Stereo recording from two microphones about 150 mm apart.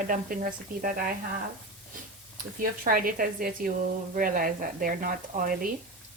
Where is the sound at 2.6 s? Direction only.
70° right (ahead or behind).